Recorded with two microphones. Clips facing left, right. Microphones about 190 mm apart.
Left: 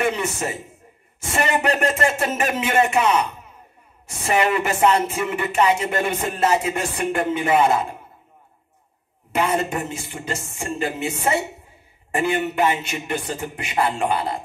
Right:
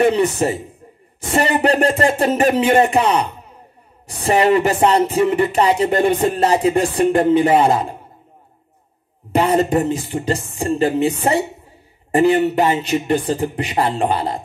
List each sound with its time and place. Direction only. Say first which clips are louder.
0.0 s speech: right 8 dB; 35° right (ahead or behind)
9.3 s speech: right 7 dB; 35° right (ahead or behind)